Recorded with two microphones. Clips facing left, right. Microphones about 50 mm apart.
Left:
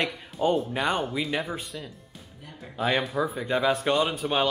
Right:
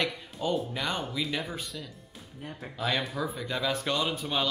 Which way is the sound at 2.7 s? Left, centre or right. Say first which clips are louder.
Left 5 dB; left.